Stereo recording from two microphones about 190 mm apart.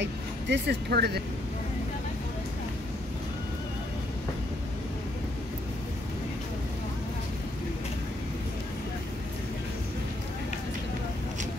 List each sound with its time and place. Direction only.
0.0 s speech: 65° right (ahead or behind)